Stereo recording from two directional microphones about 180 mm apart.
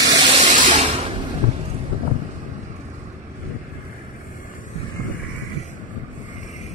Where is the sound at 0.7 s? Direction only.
35° right (ahead or behind).